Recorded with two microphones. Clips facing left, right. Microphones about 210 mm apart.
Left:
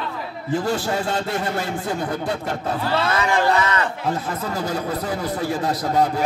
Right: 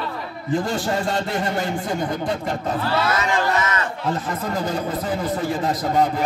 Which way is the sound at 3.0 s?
30° left (ahead or behind).